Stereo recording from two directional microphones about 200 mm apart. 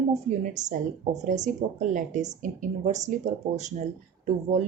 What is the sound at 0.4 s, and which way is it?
Speech, 40° right (ahead or behind).